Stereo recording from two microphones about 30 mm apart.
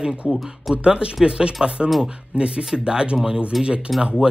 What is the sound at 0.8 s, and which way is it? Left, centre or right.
Speech, right.